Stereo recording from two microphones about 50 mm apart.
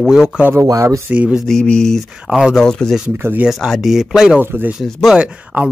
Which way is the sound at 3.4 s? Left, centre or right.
Centre.